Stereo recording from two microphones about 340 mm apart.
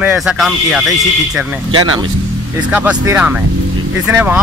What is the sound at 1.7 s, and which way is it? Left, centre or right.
Speech, right.